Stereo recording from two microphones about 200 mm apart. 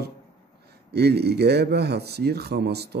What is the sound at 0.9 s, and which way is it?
Speech, 55° right (ahead or behind).